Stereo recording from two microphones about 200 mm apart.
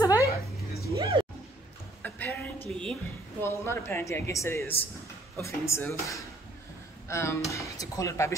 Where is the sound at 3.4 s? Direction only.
10° left (ahead or behind).